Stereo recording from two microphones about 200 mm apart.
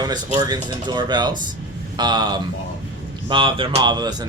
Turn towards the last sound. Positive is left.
turn(degrees=-20)  # may be behind; listen again after turning